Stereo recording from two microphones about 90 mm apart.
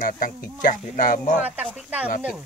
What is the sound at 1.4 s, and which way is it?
Speech, 20° right (ahead or behind).